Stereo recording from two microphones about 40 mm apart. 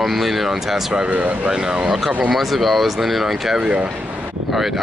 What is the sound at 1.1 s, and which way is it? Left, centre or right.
Speech, right.